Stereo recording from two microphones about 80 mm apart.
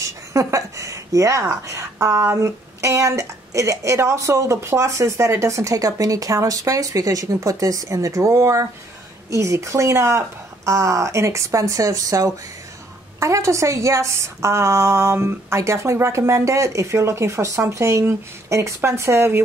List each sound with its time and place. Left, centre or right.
0.0 s speech: right